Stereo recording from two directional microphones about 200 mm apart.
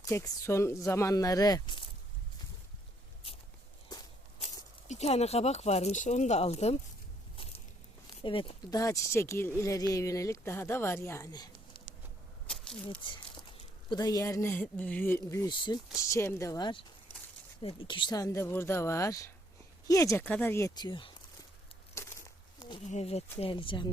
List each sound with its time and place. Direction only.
0.0 s speech: 15° left (ahead or behind)
3.9 s walk: 20° left (ahead or behind)
4.9 s speech: 35° left (ahead or behind)
8.2 s speech: 25° left (ahead or behind)
12.5 s a sound: 5° left (ahead or behind)
13.0 s speech: 25° left (ahead or behind)
22.0 s a sound: 15° left (ahead or behind)
22.7 s speech: 35° left (ahead or behind)